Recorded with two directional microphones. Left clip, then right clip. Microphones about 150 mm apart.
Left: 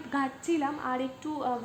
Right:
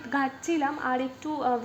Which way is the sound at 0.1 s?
35° right (ahead or behind).